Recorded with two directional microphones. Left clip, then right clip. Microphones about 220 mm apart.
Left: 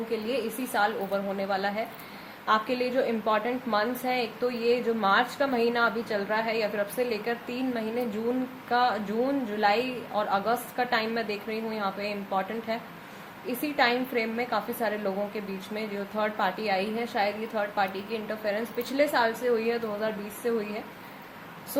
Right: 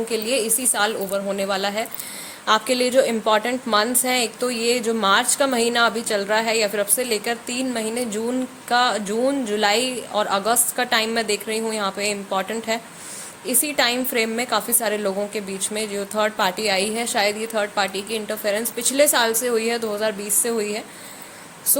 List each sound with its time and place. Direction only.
0.1 s a woman's voice: 55° right (ahead or behind)